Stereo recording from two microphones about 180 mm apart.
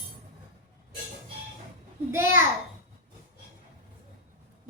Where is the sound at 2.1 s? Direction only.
15° right (ahead or behind).